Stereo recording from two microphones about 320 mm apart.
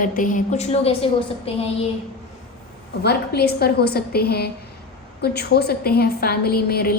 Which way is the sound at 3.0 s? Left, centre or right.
Left.